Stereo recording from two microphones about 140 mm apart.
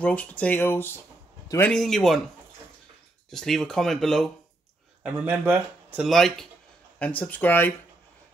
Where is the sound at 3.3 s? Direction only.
Centre (ahead or behind).